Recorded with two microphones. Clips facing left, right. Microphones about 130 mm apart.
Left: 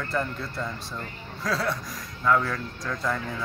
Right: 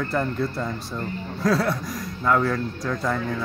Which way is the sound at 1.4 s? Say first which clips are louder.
Right 6 dB; 5° right (ahead or behind).